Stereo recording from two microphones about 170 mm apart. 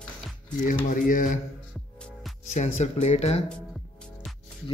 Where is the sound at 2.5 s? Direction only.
40° left (ahead or behind).